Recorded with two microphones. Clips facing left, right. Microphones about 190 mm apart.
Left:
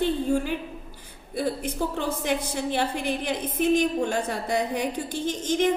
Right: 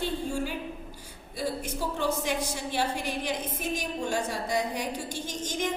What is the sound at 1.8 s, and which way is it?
A woman's voice, 55° left (ahead or behind).